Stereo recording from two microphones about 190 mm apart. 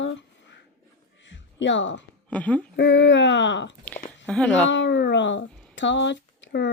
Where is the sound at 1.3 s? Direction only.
70° left (ahead or behind).